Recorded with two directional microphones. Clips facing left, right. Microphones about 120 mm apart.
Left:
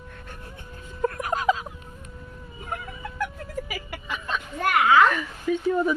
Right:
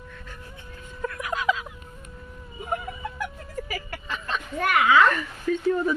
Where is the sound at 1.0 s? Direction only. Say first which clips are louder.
Left 3 dB; 40° left (ahead or behind).